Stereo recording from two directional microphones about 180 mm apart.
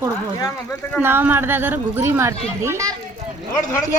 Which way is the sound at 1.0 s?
10° right (ahead or behind).